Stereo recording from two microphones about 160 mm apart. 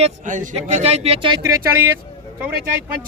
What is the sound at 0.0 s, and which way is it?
Speech, 55° right (ahead or behind).